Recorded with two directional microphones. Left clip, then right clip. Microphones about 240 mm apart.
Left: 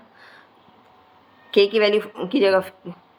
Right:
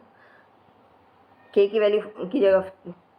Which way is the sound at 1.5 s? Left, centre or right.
Left.